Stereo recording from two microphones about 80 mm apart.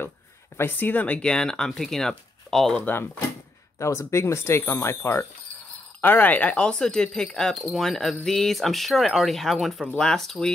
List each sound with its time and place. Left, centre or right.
0.6 s speech: left; by 2.8 s centre
2.8 s speech: left
3.7 s speech: left; by 10.5 s centre